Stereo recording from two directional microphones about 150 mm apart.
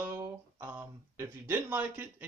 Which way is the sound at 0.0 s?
15° right (ahead or behind).